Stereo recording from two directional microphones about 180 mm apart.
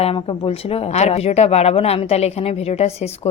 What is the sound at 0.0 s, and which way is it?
Speech, 30° left (ahead or behind).